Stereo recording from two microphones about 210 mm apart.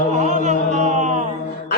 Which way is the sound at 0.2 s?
35° right (ahead or behind).